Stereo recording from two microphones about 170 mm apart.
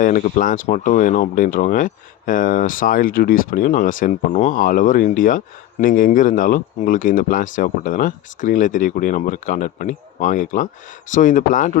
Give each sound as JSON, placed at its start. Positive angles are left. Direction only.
{"t": 0.0, "sound": "speech", "side_deg": 50}